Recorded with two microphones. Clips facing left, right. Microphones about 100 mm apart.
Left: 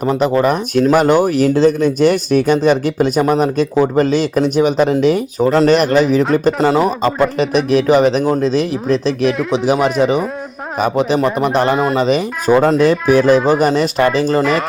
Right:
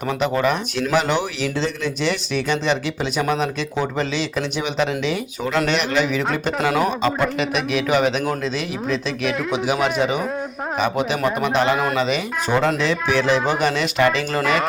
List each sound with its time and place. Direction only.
0.0 s speech: 35° left (ahead or behind)
10.8 s speech: 40° left (ahead or behind)